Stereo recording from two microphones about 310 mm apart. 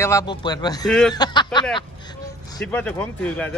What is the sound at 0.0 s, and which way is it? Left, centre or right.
Speech, centre.